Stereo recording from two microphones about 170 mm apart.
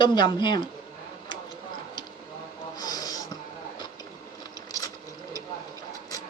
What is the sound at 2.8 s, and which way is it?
Snort, 20° left (ahead or behind).